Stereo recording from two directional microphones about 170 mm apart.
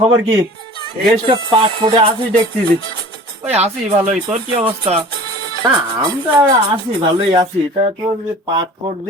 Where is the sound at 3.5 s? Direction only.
40° right (ahead or behind); by 6.5 s 20° right (ahead or behind).